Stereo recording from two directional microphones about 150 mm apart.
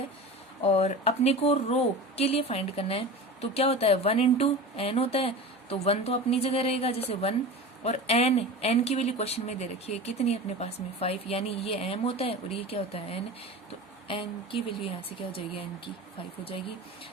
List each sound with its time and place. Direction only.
0.6 s speech: 45° left (ahead or behind)